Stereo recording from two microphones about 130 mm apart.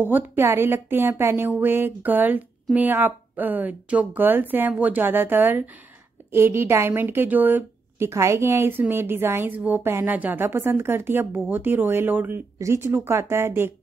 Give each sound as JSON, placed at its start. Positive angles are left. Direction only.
{"t": 0.0, "sound": "a woman's voice", "side_deg": -15}